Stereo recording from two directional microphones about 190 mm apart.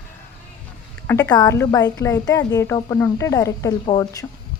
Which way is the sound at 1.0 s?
10° left (ahead or behind).